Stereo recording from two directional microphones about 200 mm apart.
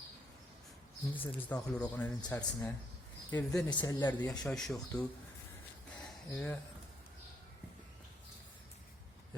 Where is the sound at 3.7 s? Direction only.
20° left (ahead or behind).